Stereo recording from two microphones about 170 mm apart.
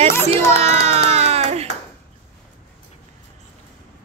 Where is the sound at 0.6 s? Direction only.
35° right (ahead or behind).